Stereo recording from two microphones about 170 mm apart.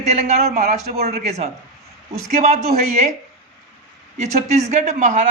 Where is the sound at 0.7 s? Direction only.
65° right (ahead or behind).